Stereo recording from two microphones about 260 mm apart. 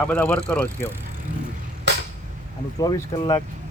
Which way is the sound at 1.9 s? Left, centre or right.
Right.